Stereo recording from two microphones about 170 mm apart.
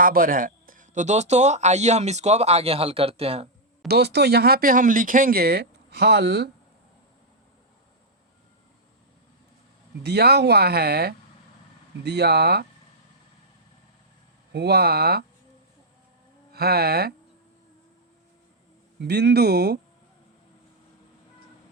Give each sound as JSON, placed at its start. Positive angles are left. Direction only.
{"t": 0.0, "sound": "speech", "side_deg": -55}
{"t": 3.8, "sound": "speech", "side_deg": -75}
{"t": 10.0, "sound": "speech", "side_deg": -75}
{"t": 14.5, "sound": "speech", "side_deg": -75}
{"t": 16.5, "sound": "a sound", "side_deg": -65}
{"t": 18.9, "sound": "speech", "side_deg": -75}